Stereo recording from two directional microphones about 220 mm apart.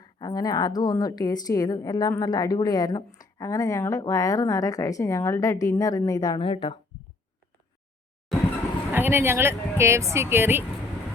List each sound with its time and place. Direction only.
0.0 s a woman's voice: 15° left (ahead or behind)
8.9 s speech: 10° right (ahead or behind)